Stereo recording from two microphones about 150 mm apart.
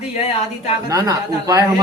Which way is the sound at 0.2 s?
45° left (ahead or behind).